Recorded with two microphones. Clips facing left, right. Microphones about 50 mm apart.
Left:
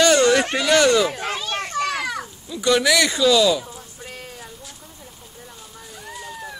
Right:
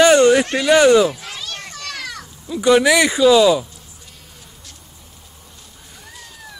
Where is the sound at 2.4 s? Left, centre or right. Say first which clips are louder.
Right 5 dB; centre.